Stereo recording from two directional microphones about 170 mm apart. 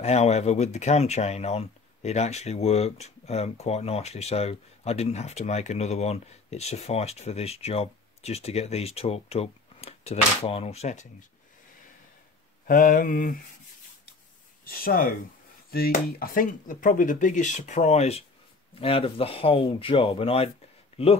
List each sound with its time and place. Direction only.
0.0 s speech: 40° left (ahead or behind)
12.6 s mantra: 55° left (ahead or behind)
14.6 s speech: 60° left (ahead or behind); by 20.5 s 35° left (ahead or behind)